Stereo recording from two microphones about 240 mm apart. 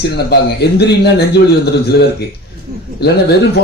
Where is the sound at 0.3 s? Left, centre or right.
Left.